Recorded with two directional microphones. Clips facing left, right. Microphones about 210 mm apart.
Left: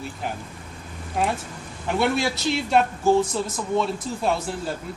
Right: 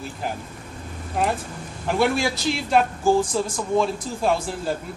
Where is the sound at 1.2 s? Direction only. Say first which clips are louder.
Right 1 dB; centre (ahead or behind).